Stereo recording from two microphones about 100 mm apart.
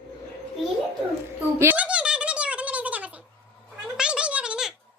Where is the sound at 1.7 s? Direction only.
10° right (ahead or behind).